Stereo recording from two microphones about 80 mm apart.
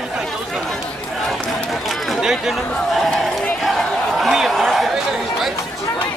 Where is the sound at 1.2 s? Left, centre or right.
Centre.